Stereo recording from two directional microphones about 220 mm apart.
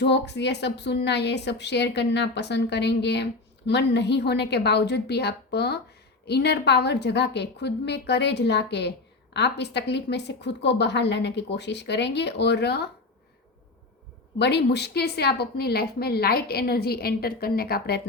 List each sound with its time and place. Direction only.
0.0 s a woman's voice: 50° left (ahead or behind)
14.3 s a woman's voice: 50° left (ahead or behind)